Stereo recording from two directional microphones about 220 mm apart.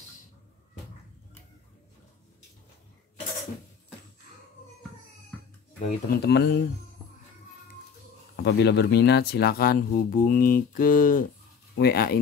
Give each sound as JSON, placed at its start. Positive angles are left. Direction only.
{"t": 5.9, "sound": "speech", "side_deg": 45}
{"t": 8.4, "sound": "speech", "side_deg": 50}